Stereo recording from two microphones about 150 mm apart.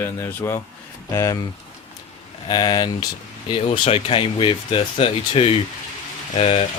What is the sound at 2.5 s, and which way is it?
Speech, 30° left (ahead or behind).